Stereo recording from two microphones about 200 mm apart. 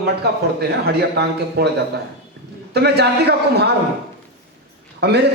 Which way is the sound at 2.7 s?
55° right (ahead or behind).